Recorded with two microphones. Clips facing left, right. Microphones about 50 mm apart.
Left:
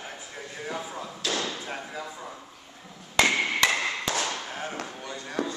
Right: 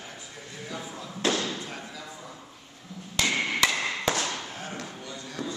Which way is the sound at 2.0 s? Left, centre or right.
Left.